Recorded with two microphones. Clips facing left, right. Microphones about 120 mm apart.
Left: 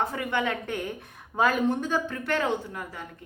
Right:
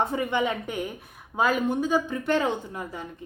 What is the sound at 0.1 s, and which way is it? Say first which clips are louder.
A woman's voice: right 3 dB; 20° right (ahead or behind).